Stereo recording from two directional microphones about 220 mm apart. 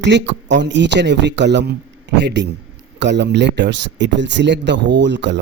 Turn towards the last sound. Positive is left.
turn(degrees=-50)  # may be behind; listen again after turning